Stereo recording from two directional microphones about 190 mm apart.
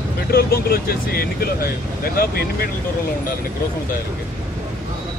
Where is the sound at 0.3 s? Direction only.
55° left (ahead or behind).